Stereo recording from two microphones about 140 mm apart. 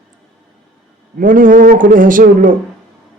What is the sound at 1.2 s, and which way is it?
A man's voice, 75° right (ahead or behind).